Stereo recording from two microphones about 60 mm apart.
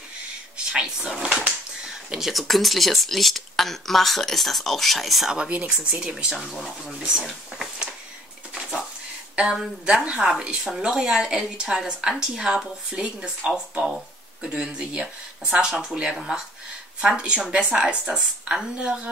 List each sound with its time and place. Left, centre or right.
0.7 s speech: centre
5.3 s speech: centre
6.3 s speech: centre
9.3 s speech: centre